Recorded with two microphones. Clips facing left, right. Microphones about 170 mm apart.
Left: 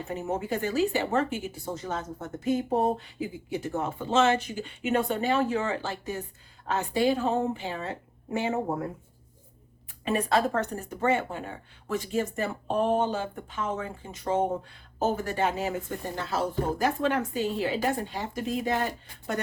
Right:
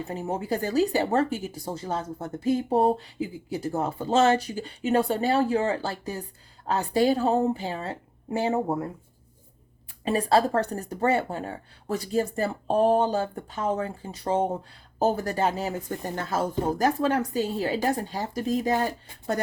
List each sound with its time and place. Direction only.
0.1 s speech: 30° right (ahead or behind)
10.0 s speech: 35° right (ahead or behind)